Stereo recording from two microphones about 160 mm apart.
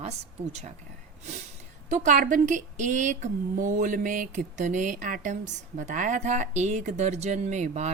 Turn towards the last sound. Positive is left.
turn(degrees=-45)  # may be behind; listen again after turning